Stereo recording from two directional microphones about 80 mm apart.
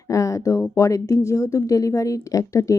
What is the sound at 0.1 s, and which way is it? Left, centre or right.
A woman's voice, left.